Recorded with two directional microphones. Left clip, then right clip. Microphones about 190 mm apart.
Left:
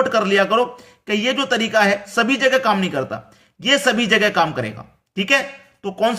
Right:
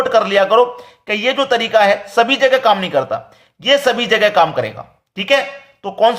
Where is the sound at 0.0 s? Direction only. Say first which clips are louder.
Right 4 dB; 20° left (ahead or behind).